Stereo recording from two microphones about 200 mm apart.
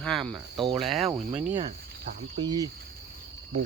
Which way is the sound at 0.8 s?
Centre (ahead or behind).